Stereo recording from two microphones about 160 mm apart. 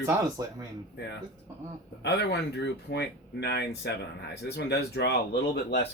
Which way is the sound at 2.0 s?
90° left.